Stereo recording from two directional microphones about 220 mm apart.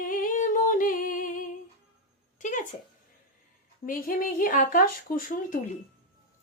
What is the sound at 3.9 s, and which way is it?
Speech, 40° left (ahead or behind).